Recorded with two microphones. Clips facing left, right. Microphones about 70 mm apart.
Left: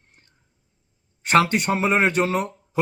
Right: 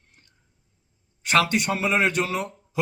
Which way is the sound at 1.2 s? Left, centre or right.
Left.